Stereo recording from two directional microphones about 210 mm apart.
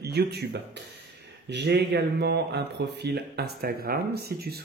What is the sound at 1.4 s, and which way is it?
Speech, 50° right (ahead or behind).